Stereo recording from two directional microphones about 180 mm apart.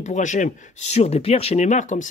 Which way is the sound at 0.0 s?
40° left (ahead or behind).